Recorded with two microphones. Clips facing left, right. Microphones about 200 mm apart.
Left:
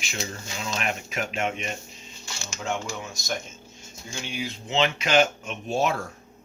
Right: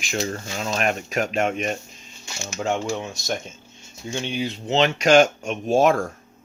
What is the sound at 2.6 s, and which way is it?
Speech, 35° right (ahead or behind).